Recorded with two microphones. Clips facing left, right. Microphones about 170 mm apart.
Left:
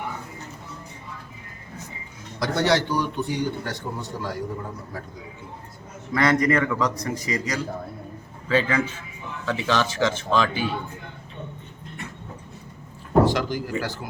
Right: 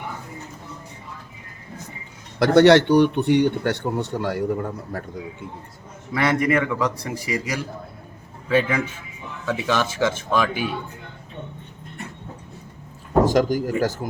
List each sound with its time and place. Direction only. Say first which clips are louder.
2.4 s a man's voice: right 9 dB; 65° right (ahead or behind)
6.1 s a man's voice: even; 10° right (ahead or behind)
13.2 s speech: right 5 dB; 45° right (ahead or behind)